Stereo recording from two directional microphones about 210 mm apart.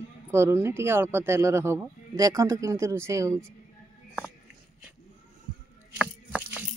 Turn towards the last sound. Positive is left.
turn(degrees=-5)  # may be behind; listen again after turning